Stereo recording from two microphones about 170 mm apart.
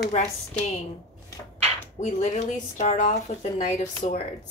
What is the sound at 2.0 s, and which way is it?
A woman's voice, 40° left (ahead or behind).